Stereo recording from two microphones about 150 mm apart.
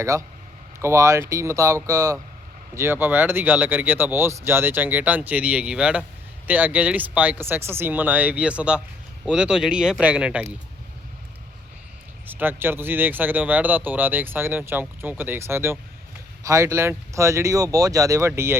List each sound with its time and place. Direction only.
0.0 s speech: 20° right (ahead or behind)
12.3 s speech: 15° right (ahead or behind)